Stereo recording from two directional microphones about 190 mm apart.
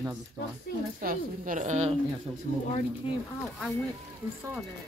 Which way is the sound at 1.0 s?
45° right (ahead or behind).